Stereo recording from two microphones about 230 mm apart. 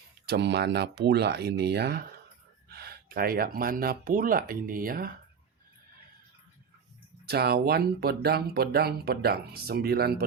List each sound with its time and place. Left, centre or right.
0.3 s speech: right
7.3 s speech: right